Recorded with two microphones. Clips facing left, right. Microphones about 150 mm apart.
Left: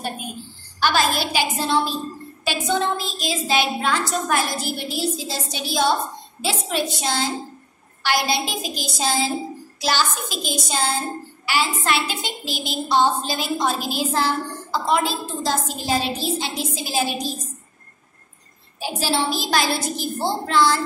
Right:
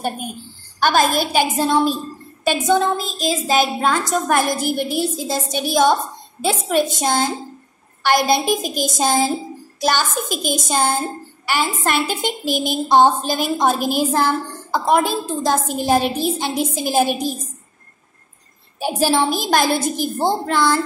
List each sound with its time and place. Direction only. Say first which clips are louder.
0.7 s a woman's voice: right 4 dB; 50° right (ahead or behind)
18.8 s a woman's voice: right 6 dB; 50° right (ahead or behind)